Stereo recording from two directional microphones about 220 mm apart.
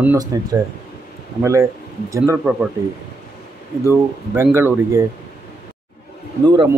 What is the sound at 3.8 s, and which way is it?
Speech, 10° right (ahead or behind).